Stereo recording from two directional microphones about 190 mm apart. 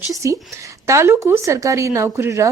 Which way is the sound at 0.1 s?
15° right (ahead or behind).